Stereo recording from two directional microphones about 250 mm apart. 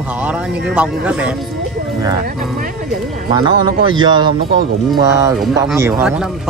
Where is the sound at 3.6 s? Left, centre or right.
Centre.